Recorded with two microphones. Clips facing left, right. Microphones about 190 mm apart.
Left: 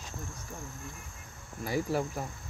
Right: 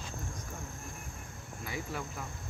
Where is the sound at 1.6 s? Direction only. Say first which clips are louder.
Left 9 dB; 40° left (ahead or behind).